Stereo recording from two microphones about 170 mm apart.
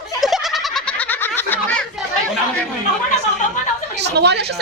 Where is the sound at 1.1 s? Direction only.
10° left (ahead or behind).